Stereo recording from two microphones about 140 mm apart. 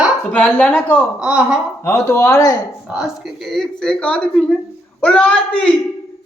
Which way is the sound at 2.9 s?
5° right (ahead or behind).